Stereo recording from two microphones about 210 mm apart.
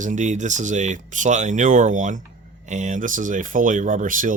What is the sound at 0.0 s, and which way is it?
Speech, 35° right (ahead or behind).